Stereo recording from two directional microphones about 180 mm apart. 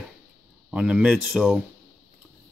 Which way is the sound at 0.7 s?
5° right (ahead or behind).